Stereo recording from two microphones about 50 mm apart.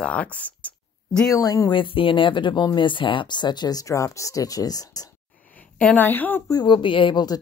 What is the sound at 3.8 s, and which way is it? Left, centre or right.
Speech, left.